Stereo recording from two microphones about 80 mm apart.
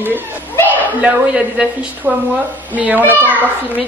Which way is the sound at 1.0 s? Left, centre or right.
Centre.